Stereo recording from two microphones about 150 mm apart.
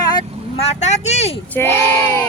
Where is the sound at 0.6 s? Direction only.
45° left (ahead or behind).